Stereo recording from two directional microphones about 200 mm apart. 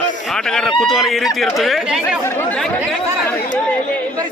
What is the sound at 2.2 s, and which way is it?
Speech, 10° left (ahead or behind).